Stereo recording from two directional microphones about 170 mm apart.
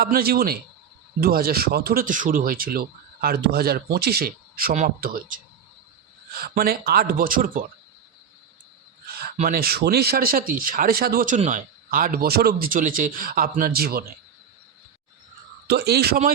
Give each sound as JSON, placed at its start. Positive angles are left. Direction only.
{"t": 0.0, "sound": "speech", "side_deg": -65}
{"t": 9.4, "sound": "speech", "side_deg": -60}
{"t": 11.3, "sound": "speech", "side_deg": -50}
{"t": 15.7, "sound": "a man's voice", "side_deg": -70}